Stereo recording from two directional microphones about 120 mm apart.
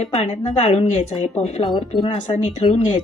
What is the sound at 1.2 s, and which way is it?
A woman's voice, 65° left (ahead or behind).